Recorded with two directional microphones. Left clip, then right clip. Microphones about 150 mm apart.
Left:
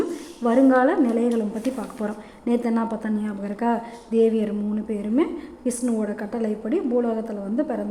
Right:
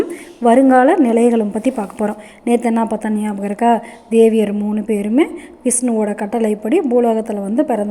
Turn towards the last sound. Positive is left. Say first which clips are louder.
# right 9 dB
turn(degrees=-30)  # may be behind; listen again after turning